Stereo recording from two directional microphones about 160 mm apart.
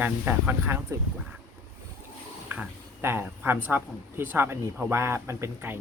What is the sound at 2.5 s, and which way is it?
Speech, 15° right (ahead or behind).